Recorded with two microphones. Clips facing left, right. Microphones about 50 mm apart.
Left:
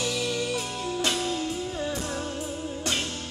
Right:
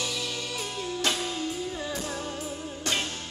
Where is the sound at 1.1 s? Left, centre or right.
Centre.